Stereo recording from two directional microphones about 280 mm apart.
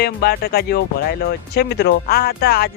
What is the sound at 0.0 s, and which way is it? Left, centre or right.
Speech, left.